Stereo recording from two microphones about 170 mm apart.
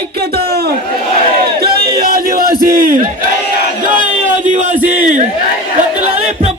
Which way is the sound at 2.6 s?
55° right (ahead or behind).